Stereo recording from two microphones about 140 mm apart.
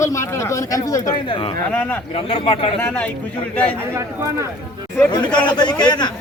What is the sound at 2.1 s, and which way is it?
Speech, 40° left (ahead or behind).